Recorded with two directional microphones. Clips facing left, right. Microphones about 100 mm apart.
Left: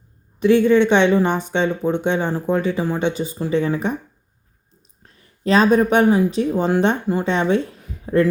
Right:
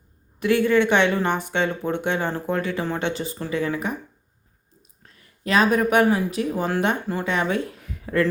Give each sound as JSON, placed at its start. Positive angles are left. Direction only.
{"t": 0.3, "sound": "speech", "side_deg": 20}
{"t": 5.4, "sound": "speech", "side_deg": 30}